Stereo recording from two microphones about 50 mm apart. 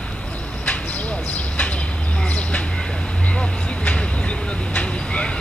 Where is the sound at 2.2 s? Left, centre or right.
Left.